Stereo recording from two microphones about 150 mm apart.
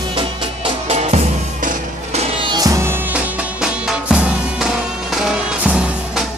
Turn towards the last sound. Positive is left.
turn(degrees=-5)  # may be behind; listen again after turning